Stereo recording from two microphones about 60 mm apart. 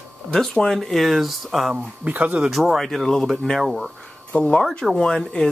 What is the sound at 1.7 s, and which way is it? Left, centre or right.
Speech, right.